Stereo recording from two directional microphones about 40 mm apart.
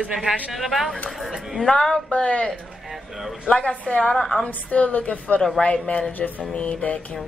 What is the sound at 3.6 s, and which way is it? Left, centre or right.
A woman's voice, left.